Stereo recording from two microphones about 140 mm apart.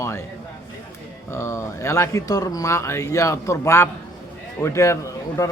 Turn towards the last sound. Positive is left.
turn(degrees=20)  # may be behind; listen again after turning